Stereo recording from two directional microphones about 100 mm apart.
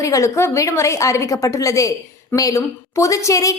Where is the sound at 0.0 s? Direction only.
30° left (ahead or behind).